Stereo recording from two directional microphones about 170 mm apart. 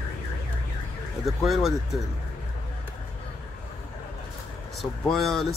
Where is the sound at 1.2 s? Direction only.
Centre (ahead or behind).